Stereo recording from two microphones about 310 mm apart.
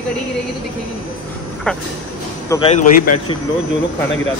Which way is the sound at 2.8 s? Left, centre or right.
Left.